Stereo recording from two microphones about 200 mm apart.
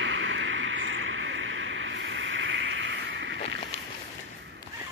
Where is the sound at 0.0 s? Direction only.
70° right (ahead or behind).